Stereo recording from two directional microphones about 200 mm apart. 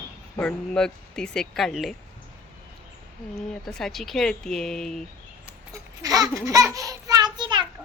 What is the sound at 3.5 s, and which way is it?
Speech, 5° left (ahead or behind).